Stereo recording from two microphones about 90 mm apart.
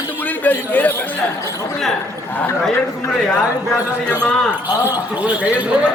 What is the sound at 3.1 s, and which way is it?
Speech, 5° left (ahead or behind).